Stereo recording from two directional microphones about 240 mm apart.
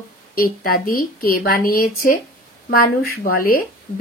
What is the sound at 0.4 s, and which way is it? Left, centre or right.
Speech, left.